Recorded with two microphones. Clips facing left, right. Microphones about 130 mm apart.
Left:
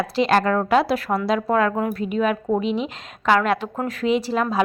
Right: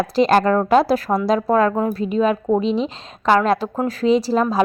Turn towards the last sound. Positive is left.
turn(degrees=-35)  # may be behind; listen again after turning